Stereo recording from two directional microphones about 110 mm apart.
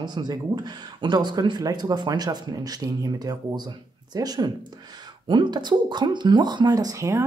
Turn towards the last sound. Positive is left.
turn(degrees=-25)  # may be behind; listen again after turning